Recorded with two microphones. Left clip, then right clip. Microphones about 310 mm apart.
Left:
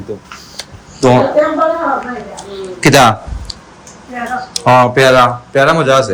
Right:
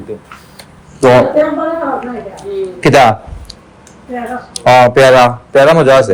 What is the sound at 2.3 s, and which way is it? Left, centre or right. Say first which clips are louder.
Speech: right 5 dB; centre.